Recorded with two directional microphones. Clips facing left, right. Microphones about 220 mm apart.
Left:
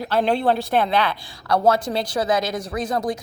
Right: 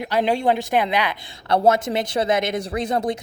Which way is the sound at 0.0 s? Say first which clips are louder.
Even; 15° right (ahead or behind).